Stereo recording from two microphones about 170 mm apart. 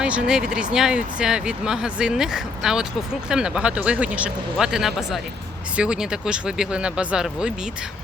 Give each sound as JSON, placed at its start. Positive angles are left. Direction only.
{"t": 0.0, "sound": "speech", "side_deg": -5}